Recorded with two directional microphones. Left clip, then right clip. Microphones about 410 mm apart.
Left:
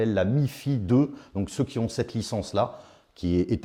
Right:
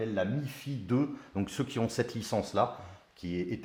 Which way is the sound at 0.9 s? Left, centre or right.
Left.